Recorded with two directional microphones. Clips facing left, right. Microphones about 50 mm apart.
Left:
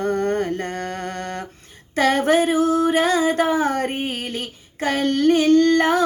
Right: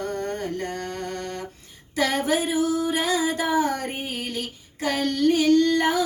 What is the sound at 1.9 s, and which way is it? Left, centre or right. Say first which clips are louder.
Female singing: left 6 dB; left.